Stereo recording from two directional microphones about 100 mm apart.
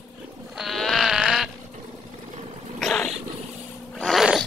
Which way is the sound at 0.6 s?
Centre (ahead or behind).